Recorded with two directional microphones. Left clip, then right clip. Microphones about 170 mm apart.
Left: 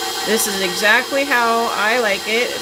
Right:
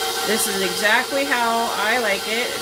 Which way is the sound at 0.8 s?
30° left (ahead or behind).